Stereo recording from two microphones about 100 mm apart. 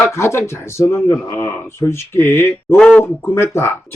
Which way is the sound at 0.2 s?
25° left (ahead or behind).